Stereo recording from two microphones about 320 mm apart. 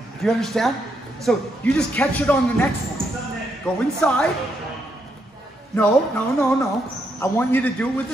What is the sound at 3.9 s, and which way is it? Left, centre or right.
Speech, centre.